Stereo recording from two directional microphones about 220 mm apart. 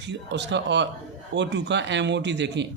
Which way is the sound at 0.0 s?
50° right (ahead or behind).